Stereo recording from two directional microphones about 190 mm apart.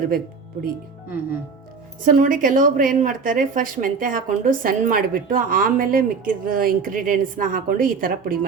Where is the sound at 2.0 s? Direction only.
45° right (ahead or behind).